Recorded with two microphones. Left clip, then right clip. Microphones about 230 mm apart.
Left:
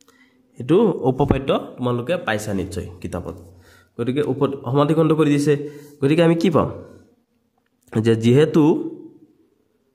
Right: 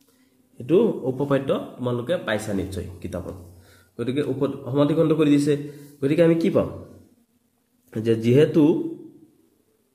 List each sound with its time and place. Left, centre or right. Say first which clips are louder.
0.6 s speech: left 3 dB; left
7.9 s speech: left 3 dB; left